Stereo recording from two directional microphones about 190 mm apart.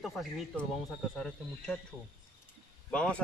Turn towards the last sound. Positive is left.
turn(degrees=5)  # may be behind; listen again after turning